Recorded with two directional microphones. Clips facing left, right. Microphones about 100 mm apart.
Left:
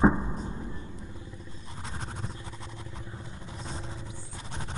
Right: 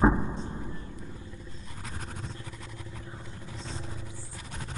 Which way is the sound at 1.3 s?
25° left (ahead or behind).